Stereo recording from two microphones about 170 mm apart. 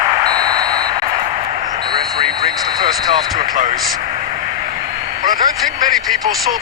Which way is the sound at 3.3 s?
50° right (ahead or behind).